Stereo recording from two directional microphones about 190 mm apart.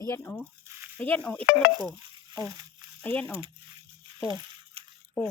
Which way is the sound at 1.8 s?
20° right (ahead or behind).